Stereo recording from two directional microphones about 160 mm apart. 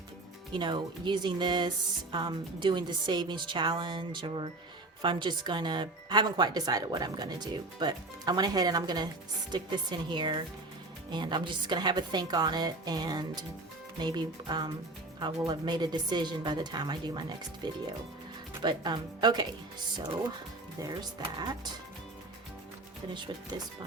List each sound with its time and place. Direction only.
0.5 s speech: 30° right (ahead or behind)
21.3 s speech: 25° right (ahead or behind)